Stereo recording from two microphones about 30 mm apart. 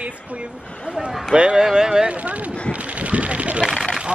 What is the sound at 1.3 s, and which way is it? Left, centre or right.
Speech, right.